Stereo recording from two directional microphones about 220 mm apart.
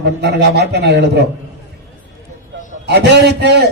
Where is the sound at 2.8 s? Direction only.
50° right (ahead or behind).